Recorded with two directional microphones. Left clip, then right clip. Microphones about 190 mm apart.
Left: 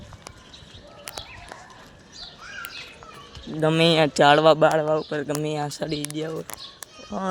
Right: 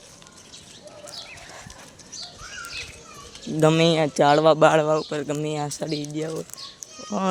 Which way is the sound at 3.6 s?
15° right (ahead or behind).